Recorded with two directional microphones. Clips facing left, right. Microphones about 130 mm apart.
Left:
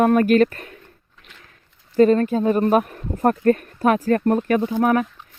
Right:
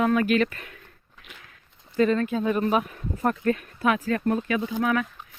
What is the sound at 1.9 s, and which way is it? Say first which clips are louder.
Speech: left 7 dB; 40° left (ahead or behind).